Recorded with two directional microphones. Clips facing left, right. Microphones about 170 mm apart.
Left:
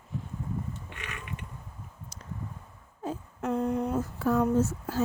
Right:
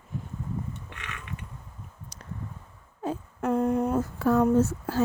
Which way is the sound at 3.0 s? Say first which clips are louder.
Right 4 dB; 55° right (ahead or behind).